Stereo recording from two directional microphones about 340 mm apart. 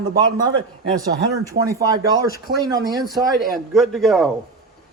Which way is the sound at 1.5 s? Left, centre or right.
Centre.